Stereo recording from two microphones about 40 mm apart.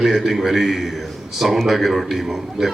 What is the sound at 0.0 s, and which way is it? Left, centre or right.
A man's voice, centre.